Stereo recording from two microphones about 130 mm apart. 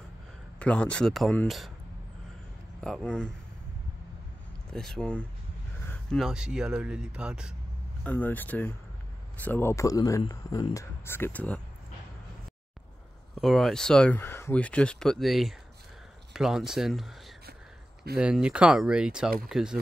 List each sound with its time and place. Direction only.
0.6 s speech: 10° left (ahead or behind)
2.8 s speech: 5° left (ahead or behind)
4.7 s speech: 5° left (ahead or behind)
6.1 s speech: 5° right (ahead or behind)
8.0 s speech: 15° left (ahead or behind)
13.3 s speech: centre (ahead or behind)
14.1 s speech: 20° left (ahead or behind); by 17.1 s centre (ahead or behind)
18.2 s speech: 10° right (ahead or behind)